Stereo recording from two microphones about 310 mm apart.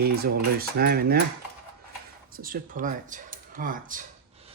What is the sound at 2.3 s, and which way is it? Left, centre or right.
Speech, right.